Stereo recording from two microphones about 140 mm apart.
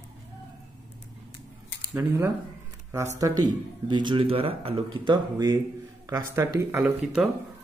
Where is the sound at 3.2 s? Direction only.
25° right (ahead or behind).